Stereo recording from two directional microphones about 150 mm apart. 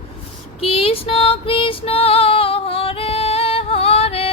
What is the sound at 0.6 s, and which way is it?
Female singing, 40° left (ahead or behind).